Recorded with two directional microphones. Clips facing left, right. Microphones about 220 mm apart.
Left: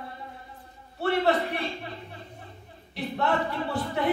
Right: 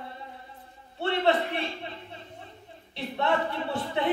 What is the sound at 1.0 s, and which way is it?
A man's voice, 25° right (ahead or behind).